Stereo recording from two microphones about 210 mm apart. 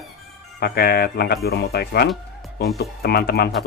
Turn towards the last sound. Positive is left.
turn(degrees=50)  # may be behind; listen again after turning